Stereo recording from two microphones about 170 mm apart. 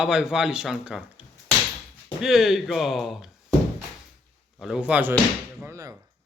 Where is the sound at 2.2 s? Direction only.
Centre (ahead or behind).